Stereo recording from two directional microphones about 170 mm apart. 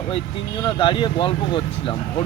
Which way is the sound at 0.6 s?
30° left (ahead or behind).